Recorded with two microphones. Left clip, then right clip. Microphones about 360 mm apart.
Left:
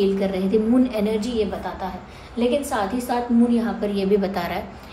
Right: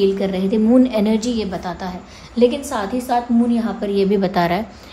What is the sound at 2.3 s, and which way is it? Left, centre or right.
A woman's voice, right.